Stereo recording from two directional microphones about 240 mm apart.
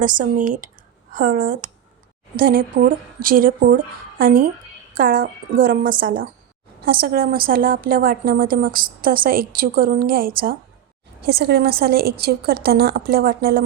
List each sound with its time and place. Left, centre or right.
0.0 s a woman's voice: right